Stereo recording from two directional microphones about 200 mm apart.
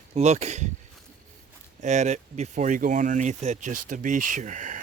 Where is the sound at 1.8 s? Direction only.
35° right (ahead or behind).